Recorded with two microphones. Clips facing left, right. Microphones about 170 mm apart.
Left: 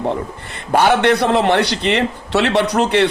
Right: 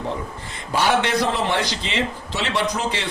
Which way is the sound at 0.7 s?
60° left (ahead or behind).